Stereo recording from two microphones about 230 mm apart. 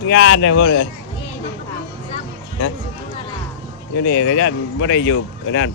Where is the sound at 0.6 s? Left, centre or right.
Left.